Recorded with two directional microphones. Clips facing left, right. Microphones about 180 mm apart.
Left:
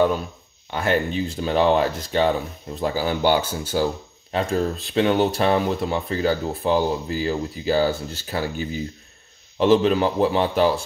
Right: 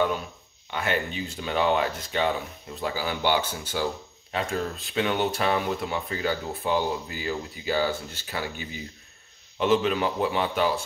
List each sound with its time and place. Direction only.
0.7 s speech: 40° left (ahead or behind)